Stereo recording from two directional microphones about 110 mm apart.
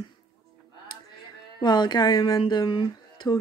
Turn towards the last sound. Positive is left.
turn(degrees=45)  # may be behind; listen again after turning